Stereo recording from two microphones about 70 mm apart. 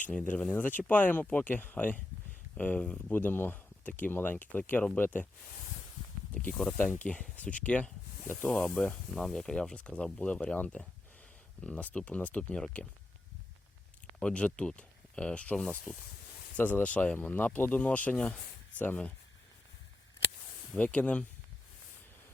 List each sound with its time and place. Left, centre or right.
0.1 s speech: centre
0.5 s speech: left
6.3 s speech: centre
9.1 s speech: centre
14.2 s speech: centre
20.7 s speech: centre